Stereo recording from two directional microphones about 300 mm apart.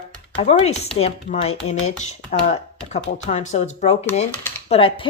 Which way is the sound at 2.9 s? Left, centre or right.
Left.